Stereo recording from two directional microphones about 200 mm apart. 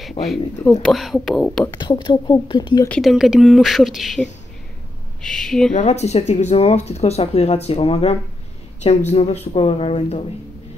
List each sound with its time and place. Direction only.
0.2 s speech: 30° left (ahead or behind)
0.8 s speech: centre (ahead or behind)
1.8 s a woman's voice: 25° left (ahead or behind)
2.9 s speech: centre (ahead or behind)
5.7 s speech: 35° left (ahead or behind)